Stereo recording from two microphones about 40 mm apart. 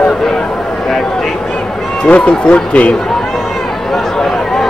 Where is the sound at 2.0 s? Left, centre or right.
Left.